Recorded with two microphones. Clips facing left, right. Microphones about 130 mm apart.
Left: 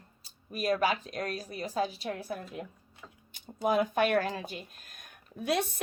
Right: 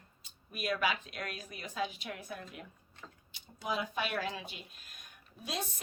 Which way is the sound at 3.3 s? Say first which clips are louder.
Left 9 dB; 50° left (ahead or behind).